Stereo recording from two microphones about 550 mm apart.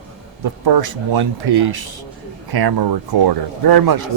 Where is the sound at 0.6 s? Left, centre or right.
Right.